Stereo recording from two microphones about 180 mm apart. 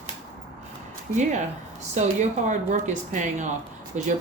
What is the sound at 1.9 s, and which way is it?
Speech, 40° right (ahead or behind).